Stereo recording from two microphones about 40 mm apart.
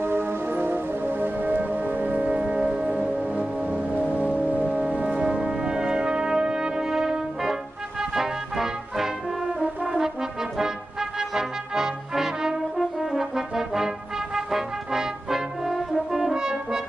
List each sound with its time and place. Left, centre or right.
0.0 s music: right
3.9 s music: left
4.2 s music: right
4.7 s brass instrument: right; by 7.5 s centre
8.0 s music: centre
10.6 s music: centre
16.1 s french horn: centre
16.3 s french horn: centre